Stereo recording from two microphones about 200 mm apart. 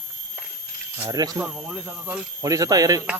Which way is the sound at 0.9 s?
15° right (ahead or behind).